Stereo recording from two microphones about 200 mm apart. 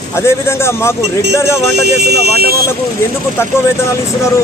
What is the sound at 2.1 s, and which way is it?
Speech, 55° right (ahead or behind).